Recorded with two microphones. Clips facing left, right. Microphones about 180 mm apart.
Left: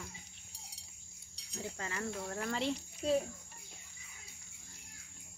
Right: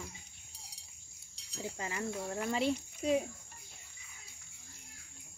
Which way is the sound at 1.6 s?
15° right (ahead or behind).